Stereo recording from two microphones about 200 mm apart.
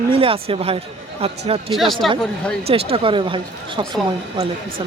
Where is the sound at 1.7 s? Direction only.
Centre (ahead or behind).